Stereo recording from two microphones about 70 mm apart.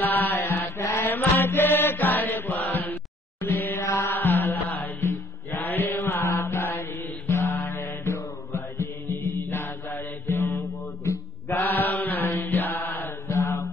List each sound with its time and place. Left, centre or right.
0.0 s mantra: left
1.0 s mantra: left
3.3 s music: left
4.1 s music: left
5.6 s mantra: left
11.5 s mantra: left
13.3 s mantra: left